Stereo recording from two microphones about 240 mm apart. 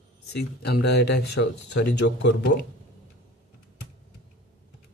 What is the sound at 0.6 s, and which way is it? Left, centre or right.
Speech, left.